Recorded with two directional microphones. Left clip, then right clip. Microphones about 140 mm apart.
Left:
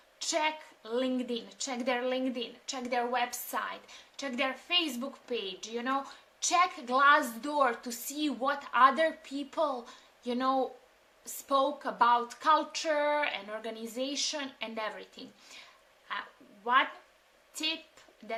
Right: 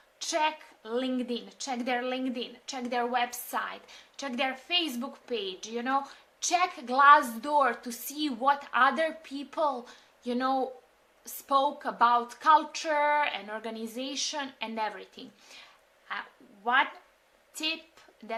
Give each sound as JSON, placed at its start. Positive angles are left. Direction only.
{"t": 0.2, "sound": "a woman's voice", "side_deg": -15}
{"t": 15.6, "sound": "a sound", "side_deg": -10}
{"t": 17.5, "sound": "a woman's voice", "side_deg": -15}